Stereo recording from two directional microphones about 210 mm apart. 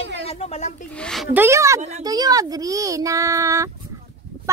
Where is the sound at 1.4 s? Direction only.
15° right (ahead or behind).